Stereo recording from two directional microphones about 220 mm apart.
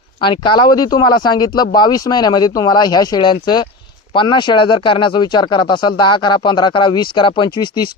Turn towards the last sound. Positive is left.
turn(degrees=20)  # may be behind; listen again after turning